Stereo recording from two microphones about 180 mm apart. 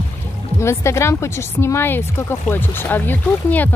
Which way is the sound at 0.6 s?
15° left (ahead or behind).